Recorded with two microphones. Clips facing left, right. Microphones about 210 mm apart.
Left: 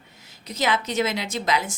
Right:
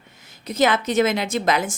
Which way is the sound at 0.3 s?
55° right (ahead or behind).